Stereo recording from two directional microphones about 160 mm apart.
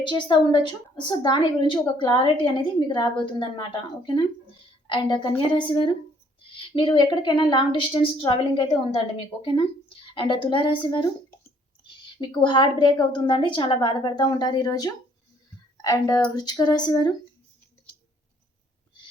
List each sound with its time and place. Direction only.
0.1 s a woman's voice: 30° left (ahead or behind)
12.1 s a woman's voice: 30° left (ahead or behind)